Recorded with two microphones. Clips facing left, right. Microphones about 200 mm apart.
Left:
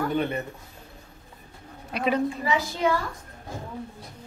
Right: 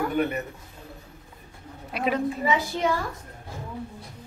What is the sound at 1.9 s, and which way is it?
Speech, centre (ahead or behind).